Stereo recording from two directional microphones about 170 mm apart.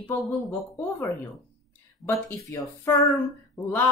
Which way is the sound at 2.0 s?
15° left (ahead or behind).